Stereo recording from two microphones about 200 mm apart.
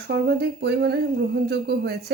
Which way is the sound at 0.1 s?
55° right (ahead or behind).